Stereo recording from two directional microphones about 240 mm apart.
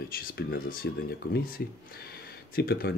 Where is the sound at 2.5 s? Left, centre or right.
Left.